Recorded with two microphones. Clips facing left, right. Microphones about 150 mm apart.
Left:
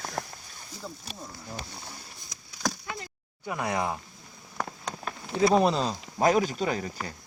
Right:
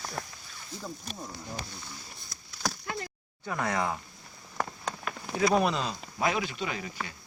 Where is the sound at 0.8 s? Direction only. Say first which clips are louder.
Right 1 dB; 5° left (ahead or behind).